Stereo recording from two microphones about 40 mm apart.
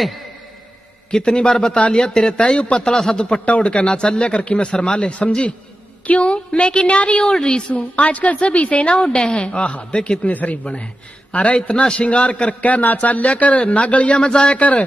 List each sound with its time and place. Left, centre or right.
1.1 s a man's voice: centre
2.9 s speech: centre
3.4 s a man's voice: left
7.7 s a man's voice: left
10.2 s a man's voice: left
11.7 s a man's voice: left
12.6 s a man's voice: left
14.2 s a man's voice: left